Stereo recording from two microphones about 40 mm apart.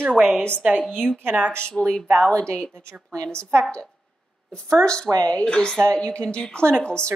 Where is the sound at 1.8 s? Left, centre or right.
Centre.